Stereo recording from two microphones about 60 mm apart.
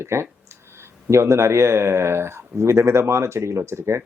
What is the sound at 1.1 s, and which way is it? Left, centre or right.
Speech, right.